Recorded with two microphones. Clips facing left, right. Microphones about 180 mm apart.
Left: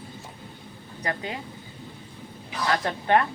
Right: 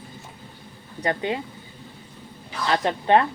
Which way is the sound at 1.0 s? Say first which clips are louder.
Right 6 dB; 25° right (ahead or behind).